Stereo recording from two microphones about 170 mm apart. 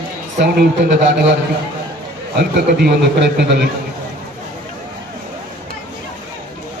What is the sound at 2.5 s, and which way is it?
A man's voice, 75° right (ahead or behind).